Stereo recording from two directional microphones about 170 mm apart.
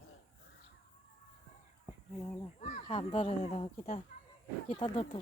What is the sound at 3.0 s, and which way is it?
Speech, 35° left (ahead or behind).